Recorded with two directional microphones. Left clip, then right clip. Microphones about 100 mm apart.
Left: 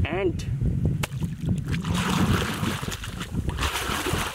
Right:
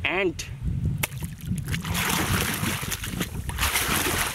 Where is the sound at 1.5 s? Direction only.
10° right (ahead or behind).